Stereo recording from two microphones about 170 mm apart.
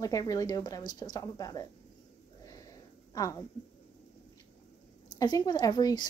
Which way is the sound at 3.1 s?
20° left (ahead or behind).